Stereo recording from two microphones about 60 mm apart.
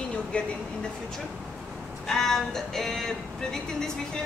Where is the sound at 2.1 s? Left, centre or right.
Centre.